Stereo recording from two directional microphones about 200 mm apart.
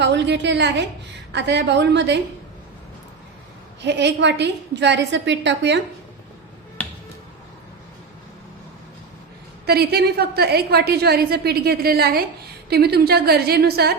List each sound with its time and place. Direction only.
0.0 s a woman's voice: 60° right (ahead or behind)
3.8 s a woman's voice: 60° right (ahead or behind)
9.6 s a woman's voice: 50° right (ahead or behind)